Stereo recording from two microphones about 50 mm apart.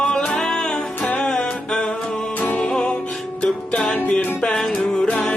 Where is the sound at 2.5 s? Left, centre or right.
Centre.